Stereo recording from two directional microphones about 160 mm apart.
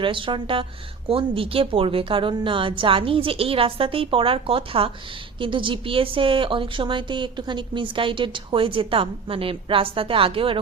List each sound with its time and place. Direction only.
0.0 s a woman's voice: 30° right (ahead or behind)